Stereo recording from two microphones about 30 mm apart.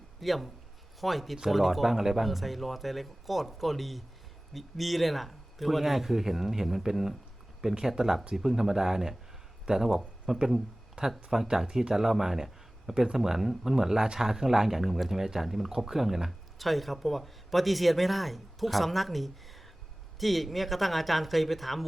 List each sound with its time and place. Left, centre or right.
0.2 s a man's voice: centre
2.2 s a man's voice: centre
11.0 s speech: right
11.4 s a man's voice: centre